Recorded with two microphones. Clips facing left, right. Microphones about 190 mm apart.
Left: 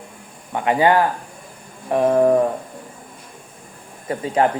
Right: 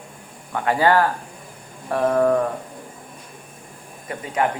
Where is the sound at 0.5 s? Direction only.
20° left (ahead or behind).